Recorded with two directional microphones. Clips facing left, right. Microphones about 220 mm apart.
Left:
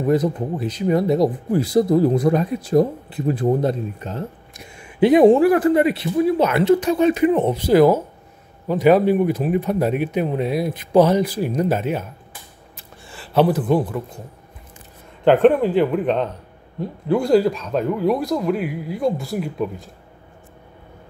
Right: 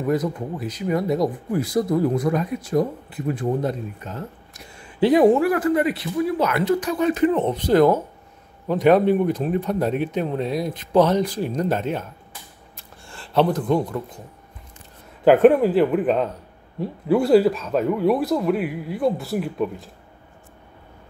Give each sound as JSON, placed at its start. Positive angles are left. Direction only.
{"t": 0.0, "sound": "speech", "side_deg": 30}
{"t": 7.2, "sound": "a man's voice", "side_deg": 10}
{"t": 12.7, "sound": "a sound", "side_deg": 5}
{"t": 15.2, "sound": "speech", "side_deg": -5}